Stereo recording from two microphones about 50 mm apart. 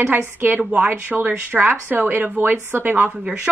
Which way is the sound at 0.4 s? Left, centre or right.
Right.